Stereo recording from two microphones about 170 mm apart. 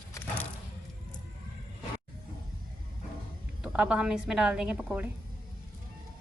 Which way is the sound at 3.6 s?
5° right (ahead or behind).